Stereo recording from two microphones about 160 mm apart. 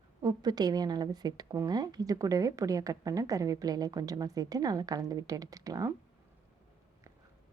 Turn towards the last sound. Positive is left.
turn(degrees=-20)  # may be behind; listen again after turning